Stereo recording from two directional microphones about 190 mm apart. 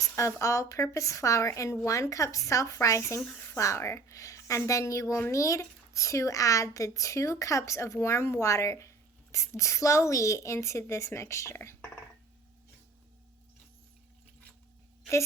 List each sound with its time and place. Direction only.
0.0 s a woman's voice: 15° left (ahead or behind)